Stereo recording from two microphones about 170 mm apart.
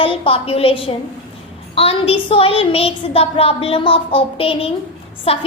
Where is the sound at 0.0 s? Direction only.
35° left (ahead or behind).